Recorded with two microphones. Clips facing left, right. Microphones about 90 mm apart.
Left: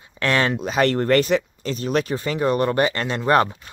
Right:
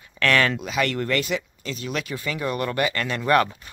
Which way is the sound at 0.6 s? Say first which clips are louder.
Left 5 dB; 35° left (ahead or behind).